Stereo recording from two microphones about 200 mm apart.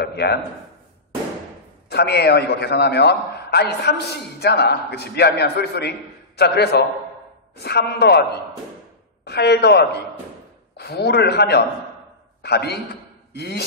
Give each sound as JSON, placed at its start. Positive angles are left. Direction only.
{"t": 0.0, "sound": "a man's voice", "side_deg": 55}
{"t": 1.9, "sound": "a man's voice", "side_deg": 55}